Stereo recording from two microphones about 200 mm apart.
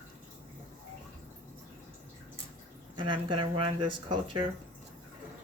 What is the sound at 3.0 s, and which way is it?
Speech, 25° right (ahead or behind).